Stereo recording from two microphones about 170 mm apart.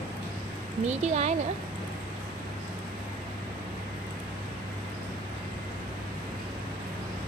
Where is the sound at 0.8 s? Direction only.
40° right (ahead or behind).